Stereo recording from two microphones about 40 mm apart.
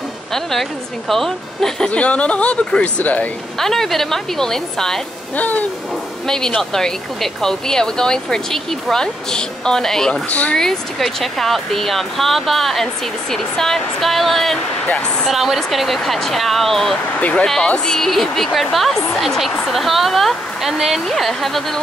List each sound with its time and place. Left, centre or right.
0.3 s speech: centre
1.9 s speech: left
3.5 s speech: centre
5.3 s owl: left
6.2 s speech: centre
17.2 s speech: left
17.7 s speech: centre
18.0 s speech: centre
21.1 s speech: centre